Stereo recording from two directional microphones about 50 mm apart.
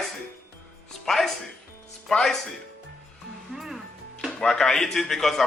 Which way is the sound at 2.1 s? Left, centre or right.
Centre.